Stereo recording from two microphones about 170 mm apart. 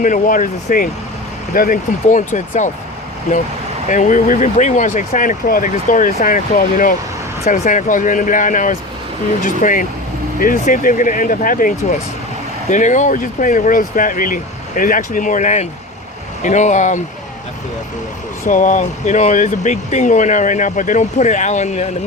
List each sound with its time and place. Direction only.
0.0 s speech: 50° left (ahead or behind)
3.8 s speech: 50° left (ahead or behind)
18.4 s speech: 50° left (ahead or behind)